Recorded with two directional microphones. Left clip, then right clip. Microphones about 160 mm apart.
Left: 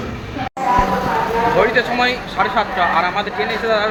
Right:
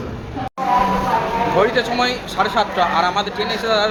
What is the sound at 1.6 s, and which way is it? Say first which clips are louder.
Speech: left 2 dB; 15° right (ahead or behind).